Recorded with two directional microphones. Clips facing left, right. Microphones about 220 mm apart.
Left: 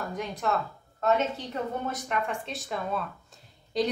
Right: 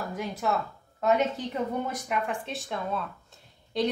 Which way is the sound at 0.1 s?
5° right (ahead or behind).